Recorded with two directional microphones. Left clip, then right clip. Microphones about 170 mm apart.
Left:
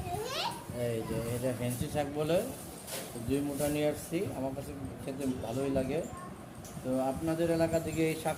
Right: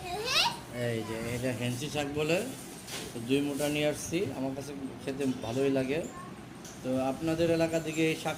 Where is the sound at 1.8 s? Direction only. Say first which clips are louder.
Right 1 dB; 15° left (ahead or behind).